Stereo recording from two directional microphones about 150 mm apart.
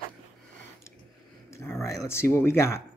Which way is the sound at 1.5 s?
20° left (ahead or behind).